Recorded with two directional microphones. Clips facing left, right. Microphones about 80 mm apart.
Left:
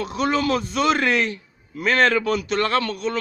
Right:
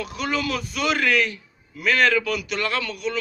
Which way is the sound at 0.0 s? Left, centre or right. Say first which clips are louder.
Left 4 dB; left.